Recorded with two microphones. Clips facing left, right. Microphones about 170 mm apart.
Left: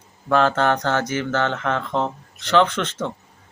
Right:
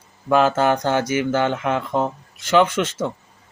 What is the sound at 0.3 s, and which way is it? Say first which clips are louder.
Speech: right 2 dB; 10° right (ahead or behind).